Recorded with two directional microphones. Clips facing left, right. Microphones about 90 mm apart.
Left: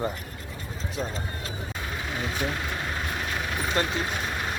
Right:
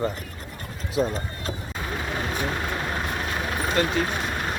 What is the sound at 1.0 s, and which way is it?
Speech, 40° right (ahead or behind).